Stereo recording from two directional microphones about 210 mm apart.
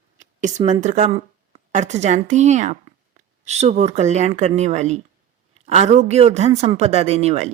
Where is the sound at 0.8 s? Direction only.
30° right (ahead or behind).